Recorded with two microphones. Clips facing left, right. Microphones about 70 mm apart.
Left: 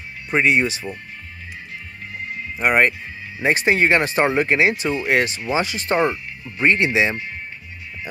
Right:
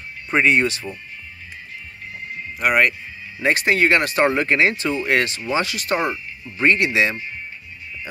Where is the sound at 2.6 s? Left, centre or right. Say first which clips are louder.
Left 1 dB; left.